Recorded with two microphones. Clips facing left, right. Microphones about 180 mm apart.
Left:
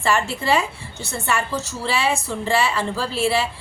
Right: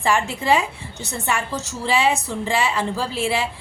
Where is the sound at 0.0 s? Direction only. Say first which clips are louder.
Even; 15° right (ahead or behind).